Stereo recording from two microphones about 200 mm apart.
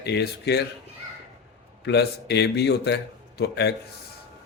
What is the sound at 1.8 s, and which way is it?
Speech, 55° left (ahead or behind).